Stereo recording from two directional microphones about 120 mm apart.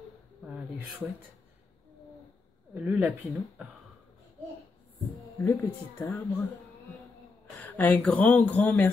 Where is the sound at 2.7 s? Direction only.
15° right (ahead or behind).